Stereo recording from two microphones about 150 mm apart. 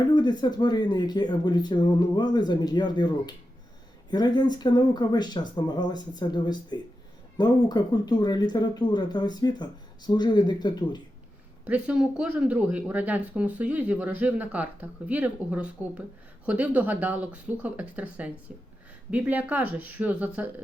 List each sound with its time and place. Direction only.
0.1 s speech: 30° left (ahead or behind)
11.6 s speech: 10° right (ahead or behind)